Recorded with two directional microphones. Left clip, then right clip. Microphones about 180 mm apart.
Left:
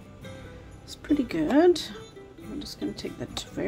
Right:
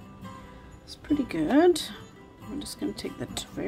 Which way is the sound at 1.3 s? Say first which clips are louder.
Even; centre (ahead or behind).